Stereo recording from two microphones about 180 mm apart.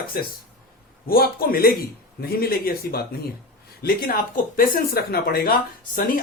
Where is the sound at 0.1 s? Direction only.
55° left (ahead or behind).